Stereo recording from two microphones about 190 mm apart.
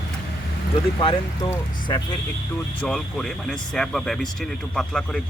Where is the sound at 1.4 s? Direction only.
20° left (ahead or behind).